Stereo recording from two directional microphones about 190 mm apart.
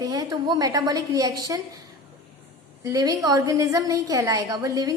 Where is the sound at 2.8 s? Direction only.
20° right (ahead or behind).